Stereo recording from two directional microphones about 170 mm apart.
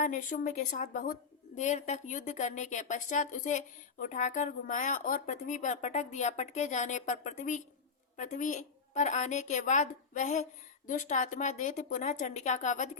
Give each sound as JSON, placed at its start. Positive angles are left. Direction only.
{"t": 0.0, "sound": "a woman's voice", "side_deg": 50}